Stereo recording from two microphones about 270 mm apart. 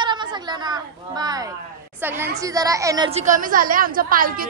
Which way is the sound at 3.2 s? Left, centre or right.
Right.